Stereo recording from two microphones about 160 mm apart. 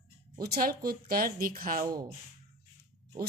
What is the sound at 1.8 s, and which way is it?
Speech, 25° right (ahead or behind).